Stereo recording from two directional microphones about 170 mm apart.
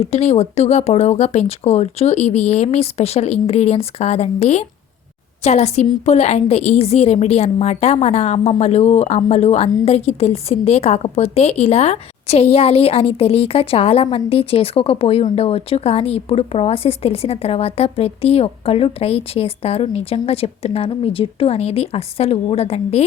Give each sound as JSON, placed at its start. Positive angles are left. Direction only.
{"t": 0.0, "sound": "a woman's voice", "side_deg": 40}